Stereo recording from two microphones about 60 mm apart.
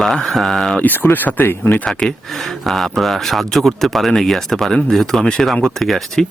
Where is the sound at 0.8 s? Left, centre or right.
Left.